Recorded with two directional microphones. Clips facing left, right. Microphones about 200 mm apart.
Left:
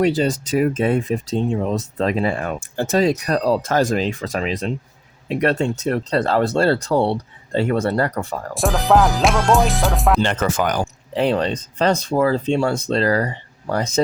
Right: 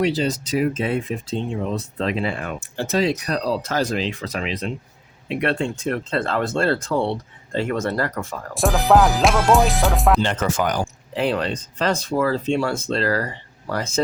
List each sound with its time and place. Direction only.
0.0 s speech: 50° left (ahead or behind); by 8.4 s 35° left (ahead or behind)
8.5 s music: centre (ahead or behind)
10.2 s speech: 55° left (ahead or behind)
11.2 s speech: 35° left (ahead or behind)
13.1 s speech: 20° left (ahead or behind)
13.7 s speech: 35° left (ahead or behind)